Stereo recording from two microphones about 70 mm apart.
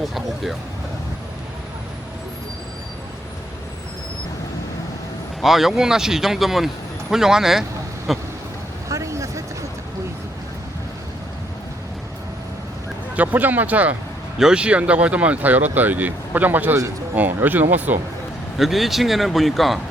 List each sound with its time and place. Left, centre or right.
0.0 s speech: centre
5.4 s speech: centre
8.9 s a sound: right
13.1 s speech: right
14.3 s speech: centre
18.5 s speech: centre